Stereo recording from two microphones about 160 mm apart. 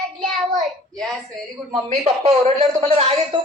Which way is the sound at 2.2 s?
40° right (ahead or behind).